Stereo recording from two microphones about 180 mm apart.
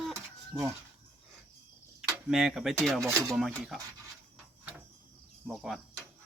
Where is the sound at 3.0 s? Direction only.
15° right (ahead or behind).